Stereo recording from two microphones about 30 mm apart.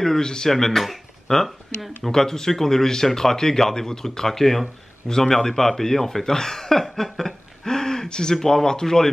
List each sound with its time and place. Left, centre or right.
0.0 s speech: centre
0.5 s speech: centre
7.6 s a sound: centre
8.4 s speech: centre